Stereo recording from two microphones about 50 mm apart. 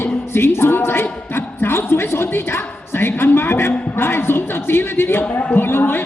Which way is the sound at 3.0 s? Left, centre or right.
Left.